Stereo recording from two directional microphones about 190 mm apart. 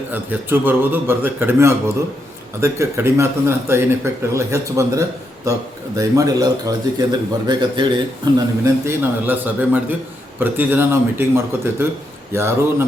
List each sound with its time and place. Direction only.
0.1 s a man's voice: 10° right (ahead or behind)